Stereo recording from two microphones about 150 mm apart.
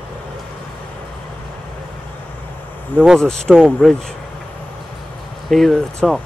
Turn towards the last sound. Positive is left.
turn(degrees=0)  # may be behind; listen again after turning